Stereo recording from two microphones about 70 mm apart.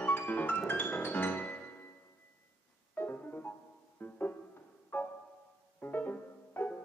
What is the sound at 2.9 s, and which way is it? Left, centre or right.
Music, left.